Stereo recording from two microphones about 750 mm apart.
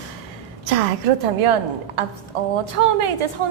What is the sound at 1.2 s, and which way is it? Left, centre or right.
Speech, right.